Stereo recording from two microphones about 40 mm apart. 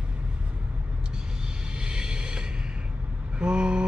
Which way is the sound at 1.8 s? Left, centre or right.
Centre.